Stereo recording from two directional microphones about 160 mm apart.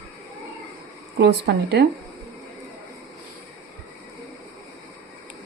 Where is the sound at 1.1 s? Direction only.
90° right.